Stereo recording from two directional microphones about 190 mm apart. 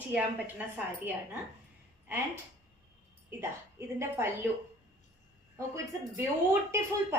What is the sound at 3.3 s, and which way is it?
A woman's voice, 15° right (ahead or behind).